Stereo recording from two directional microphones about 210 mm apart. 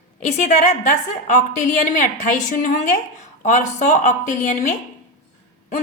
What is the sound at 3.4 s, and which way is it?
A woman's voice, 35° left (ahead or behind).